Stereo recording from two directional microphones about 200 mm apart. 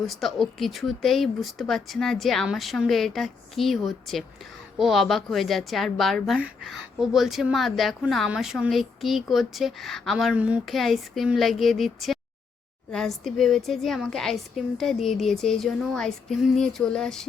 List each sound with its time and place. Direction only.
0.0 s a woman's voice: centre (ahead or behind)